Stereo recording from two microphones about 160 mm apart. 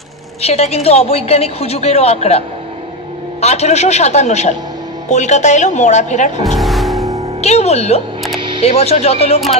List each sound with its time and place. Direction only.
0.4 s a woman's voice: 40° left (ahead or behind)
6.4 s music: centre (ahead or behind)
7.4 s a woman's voice: 45° left (ahead or behind)
8.4 s camera: 30° right (ahead or behind)
8.6 s speech: 40° left (ahead or behind)